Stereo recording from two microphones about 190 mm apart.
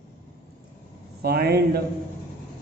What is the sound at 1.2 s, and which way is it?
Speech, 55° right (ahead or behind).